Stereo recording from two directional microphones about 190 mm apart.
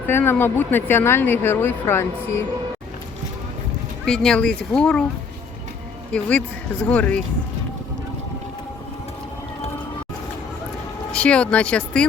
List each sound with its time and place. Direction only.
0.1 s a woman's voice: 10° left (ahead or behind)
4.0 s speech: centre (ahead or behind)
6.1 s a woman's voice: 5° left (ahead or behind)
11.1 s speech: 5° left (ahead or behind)